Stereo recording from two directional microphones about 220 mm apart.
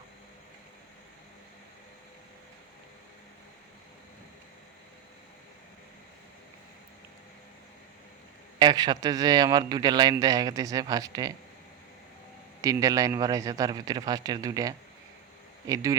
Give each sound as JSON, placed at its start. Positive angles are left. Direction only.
{"t": 8.5, "sound": "speech", "side_deg": -20}
{"t": 12.6, "sound": "speech", "side_deg": -15}